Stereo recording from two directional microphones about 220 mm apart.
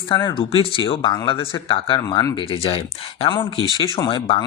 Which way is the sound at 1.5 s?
25° left (ahead or behind).